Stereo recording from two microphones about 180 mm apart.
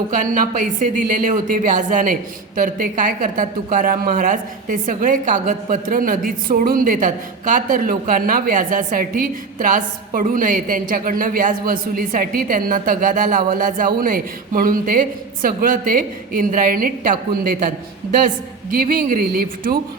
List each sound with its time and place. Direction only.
0.1 s a woman's voice: 45° right (ahead or behind)
18.8 s a woman's voice: 50° right (ahead or behind)